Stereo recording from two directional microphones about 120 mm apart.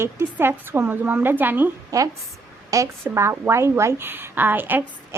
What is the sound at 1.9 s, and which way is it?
A woman's voice, 25° right (ahead or behind).